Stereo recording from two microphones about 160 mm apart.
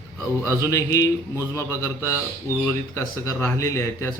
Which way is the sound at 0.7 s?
20° left (ahead or behind).